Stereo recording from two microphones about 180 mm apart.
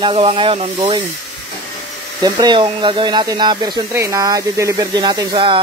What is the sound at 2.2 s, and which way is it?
Speech, 25° right (ahead or behind).